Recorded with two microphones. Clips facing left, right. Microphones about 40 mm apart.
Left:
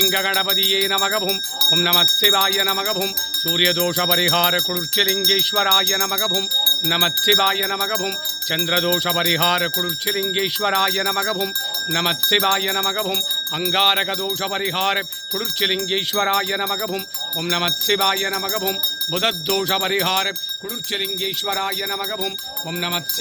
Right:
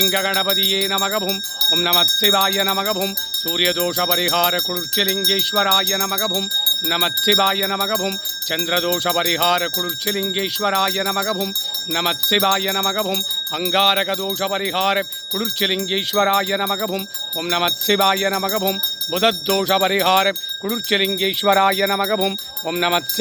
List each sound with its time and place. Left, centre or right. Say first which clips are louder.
0.1 s jingle bell: right 1 dB; centre
1.0 s speech: even; centre
3.4 s jingle bell: left 1 dB; centre
6.8 s speech: right 1 dB; centre
10.3 s jingle bell: even; centre
11.9 s speech: even; centre
20.7 s speech: right 8 dB; right